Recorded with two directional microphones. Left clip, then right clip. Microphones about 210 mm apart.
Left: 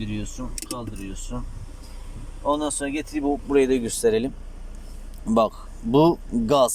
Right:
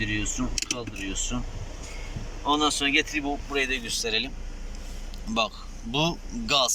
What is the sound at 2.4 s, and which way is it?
Speech, 5° left (ahead or behind).